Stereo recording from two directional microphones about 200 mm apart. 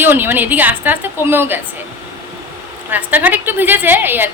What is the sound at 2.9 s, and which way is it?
A woman's voice, 10° right (ahead or behind).